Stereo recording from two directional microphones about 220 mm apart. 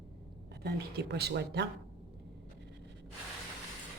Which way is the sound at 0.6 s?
45° right (ahead or behind).